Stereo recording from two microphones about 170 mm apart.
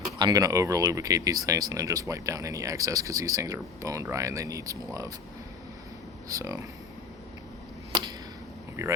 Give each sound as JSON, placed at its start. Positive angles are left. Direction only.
{"t": 0.2, "sound": "speech", "side_deg": -25}
{"t": 6.2, "sound": "speech", "side_deg": -20}
{"t": 8.8, "sound": "speech", "side_deg": -15}